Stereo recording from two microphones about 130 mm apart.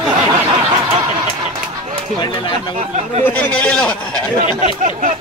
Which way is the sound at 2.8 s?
65° right (ahead or behind).